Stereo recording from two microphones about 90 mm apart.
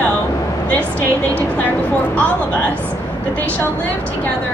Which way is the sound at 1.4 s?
20° left (ahead or behind).